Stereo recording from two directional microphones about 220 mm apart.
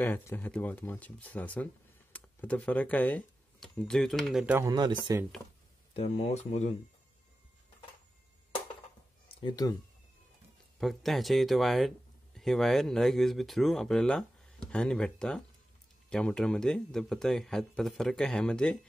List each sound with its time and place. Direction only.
0.0 s speech: 10° left (ahead or behind); by 5.2 s 20° right (ahead or behind)
5.9 s speech: 30° left (ahead or behind)
9.3 s speech: 20° left (ahead or behind)
10.8 s a man's voice: centre (ahead or behind)